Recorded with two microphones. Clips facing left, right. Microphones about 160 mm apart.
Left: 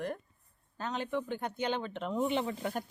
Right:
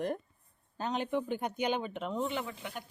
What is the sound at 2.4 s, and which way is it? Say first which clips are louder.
Speech: left 7 dB; 40° left (ahead or behind).